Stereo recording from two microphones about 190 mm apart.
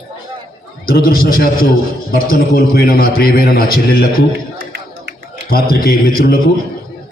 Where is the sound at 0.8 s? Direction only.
50° left (ahead or behind).